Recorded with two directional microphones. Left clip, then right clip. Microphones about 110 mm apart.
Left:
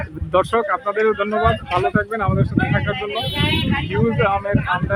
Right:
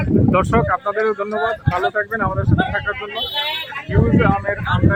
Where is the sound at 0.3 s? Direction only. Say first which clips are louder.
Left 1 dB; 20° left (ahead or behind).